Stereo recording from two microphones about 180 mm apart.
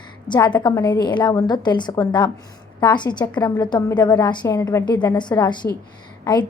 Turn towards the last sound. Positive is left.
turn(degrees=25)  # may be behind; listen again after turning